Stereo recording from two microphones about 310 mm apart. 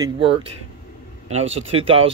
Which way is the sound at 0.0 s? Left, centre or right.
Centre.